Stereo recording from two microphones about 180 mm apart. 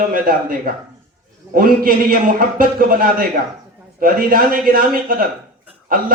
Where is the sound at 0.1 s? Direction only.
50° right (ahead or behind).